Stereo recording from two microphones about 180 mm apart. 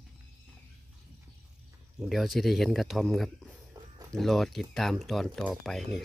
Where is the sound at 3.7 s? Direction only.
20° right (ahead or behind).